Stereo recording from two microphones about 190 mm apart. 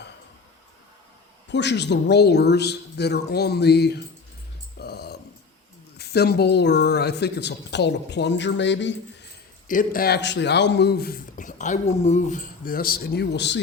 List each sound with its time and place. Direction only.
1.5 s a woman's voice: 65° left (ahead or behind)
4.8 s music: 55° left (ahead or behind)
6.0 s a woman's voice: 60° left (ahead or behind)
9.6 s speech: 45° left (ahead or behind); by 13.6 s 65° left (ahead or behind)